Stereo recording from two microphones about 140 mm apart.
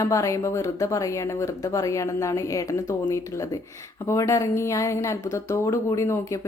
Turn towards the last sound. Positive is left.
turn(degrees=20)  # may be behind; listen again after turning